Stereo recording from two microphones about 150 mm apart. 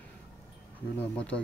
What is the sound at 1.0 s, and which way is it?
Speech, 10° left (ahead or behind).